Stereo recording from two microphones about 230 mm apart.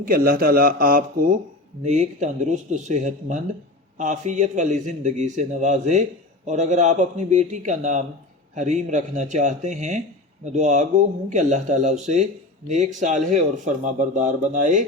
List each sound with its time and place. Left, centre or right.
0.0 s speech: right